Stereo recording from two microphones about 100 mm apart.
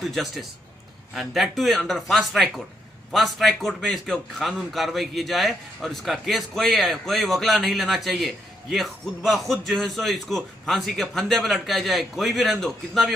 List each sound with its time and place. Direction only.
0.0 s a man's voice: centre (ahead or behind)